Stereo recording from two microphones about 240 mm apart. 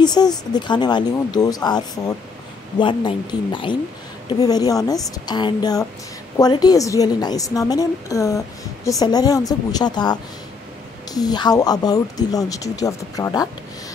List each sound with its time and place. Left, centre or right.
0.0 s speech: centre